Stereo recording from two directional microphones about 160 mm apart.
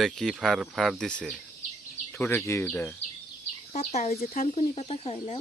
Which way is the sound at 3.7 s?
45° left (ahead or behind).